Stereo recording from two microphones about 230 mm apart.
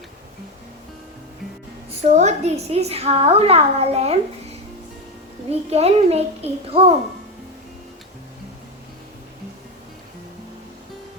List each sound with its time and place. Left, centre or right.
1.9 s a woman's voice: right
5.5 s a woman's voice: right